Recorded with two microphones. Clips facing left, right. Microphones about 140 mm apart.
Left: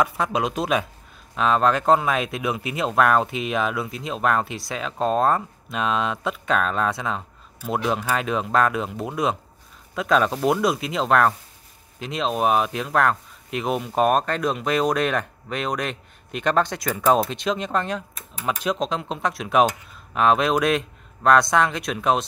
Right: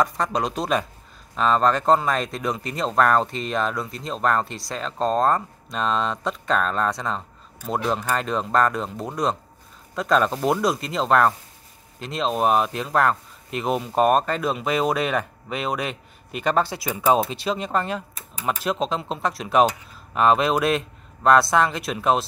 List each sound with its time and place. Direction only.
0.0 s speech: 5° left (ahead or behind)